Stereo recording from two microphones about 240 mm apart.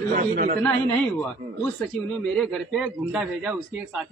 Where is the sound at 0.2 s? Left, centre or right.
Right.